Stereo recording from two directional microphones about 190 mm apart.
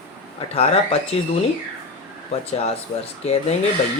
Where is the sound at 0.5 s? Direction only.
30° left (ahead or behind).